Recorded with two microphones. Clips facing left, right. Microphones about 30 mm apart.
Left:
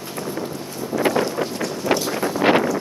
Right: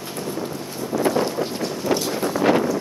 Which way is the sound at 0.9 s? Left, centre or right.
Centre.